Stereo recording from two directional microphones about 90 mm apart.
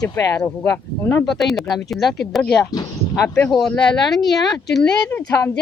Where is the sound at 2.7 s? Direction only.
45° left (ahead or behind).